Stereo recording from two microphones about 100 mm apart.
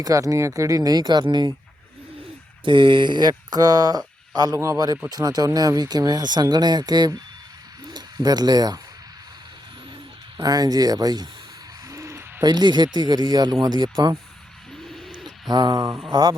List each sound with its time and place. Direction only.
0.0 s speech: 35° right (ahead or behind)
2.6 s speech: 55° right (ahead or behind)
10.3 s speech: 40° right (ahead or behind)
11.9 s owl: 30° right (ahead or behind)
12.5 s speech: 45° right (ahead or behind)
14.8 s bird: centre (ahead or behind)
15.4 s speech: 45° right (ahead or behind)